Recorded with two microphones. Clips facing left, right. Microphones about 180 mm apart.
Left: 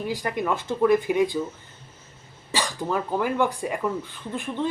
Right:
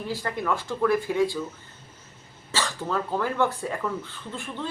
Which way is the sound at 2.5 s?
15° left (ahead or behind).